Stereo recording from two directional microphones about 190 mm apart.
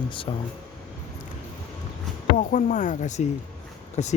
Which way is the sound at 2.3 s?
45° left (ahead or behind).